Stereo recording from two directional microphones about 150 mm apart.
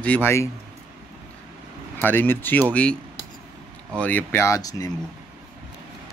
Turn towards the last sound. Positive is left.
turn(degrees=20)  # may be behind; listen again after turning